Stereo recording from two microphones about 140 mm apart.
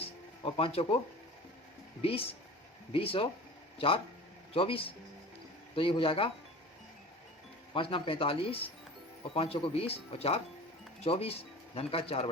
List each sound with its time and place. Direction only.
0.0 s music: 45° left (ahead or behind)
2.0 s speech: 40° left (ahead or behind)
7.7 s speech: 40° left (ahead or behind)